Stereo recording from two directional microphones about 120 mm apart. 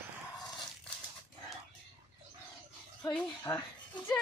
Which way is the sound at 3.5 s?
35° left (ahead or behind).